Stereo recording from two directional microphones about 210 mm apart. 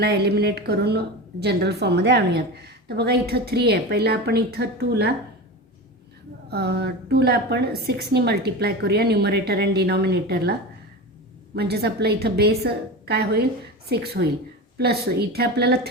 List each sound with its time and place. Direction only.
0.0 s a woman's voice: 50° right (ahead or behind)
6.5 s a woman's voice: 50° right (ahead or behind)
11.5 s a woman's voice: 50° right (ahead or behind)